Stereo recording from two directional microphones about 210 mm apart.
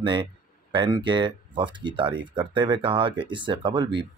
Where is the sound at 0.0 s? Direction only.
20° right (ahead or behind).